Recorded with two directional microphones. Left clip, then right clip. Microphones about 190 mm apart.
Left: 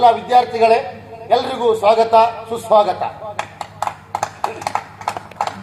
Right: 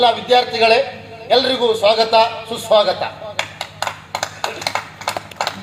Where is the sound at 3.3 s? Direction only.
20° right (ahead or behind).